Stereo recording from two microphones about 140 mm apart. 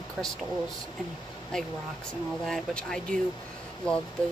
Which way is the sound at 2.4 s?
5° left (ahead or behind).